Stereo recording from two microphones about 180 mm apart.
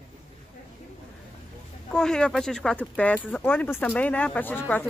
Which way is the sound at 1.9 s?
5° left (ahead or behind).